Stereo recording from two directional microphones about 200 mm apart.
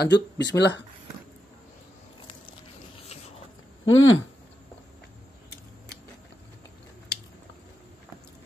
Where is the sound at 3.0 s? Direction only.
30° left (ahead or behind).